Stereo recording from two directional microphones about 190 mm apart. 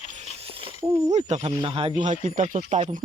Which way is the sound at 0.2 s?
30° right (ahead or behind).